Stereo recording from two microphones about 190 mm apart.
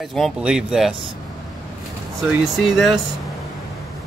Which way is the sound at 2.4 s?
Centre (ahead or behind).